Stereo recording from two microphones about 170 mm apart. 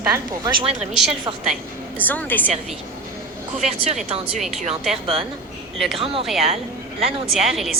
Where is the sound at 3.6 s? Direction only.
40° right (ahead or behind).